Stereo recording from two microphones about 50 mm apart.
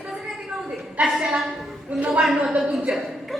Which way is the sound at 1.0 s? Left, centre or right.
Centre.